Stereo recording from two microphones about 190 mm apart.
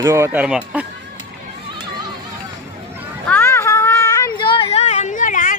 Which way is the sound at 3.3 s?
10° left (ahead or behind).